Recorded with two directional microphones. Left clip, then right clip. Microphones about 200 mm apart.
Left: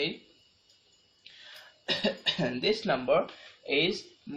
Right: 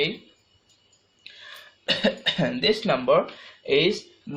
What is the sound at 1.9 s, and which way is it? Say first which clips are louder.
Speech: right 6 dB; 40° right (ahead or behind).